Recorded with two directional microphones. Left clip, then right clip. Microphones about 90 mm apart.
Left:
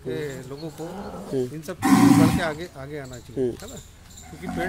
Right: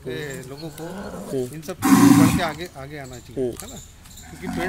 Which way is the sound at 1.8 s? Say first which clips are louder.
Right 2 dB; 50° right (ahead or behind).